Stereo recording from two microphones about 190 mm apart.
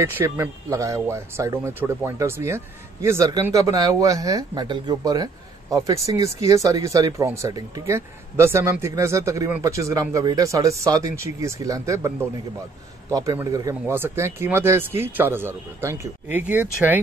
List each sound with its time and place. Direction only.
0.0 s speech: 10° right (ahead or behind)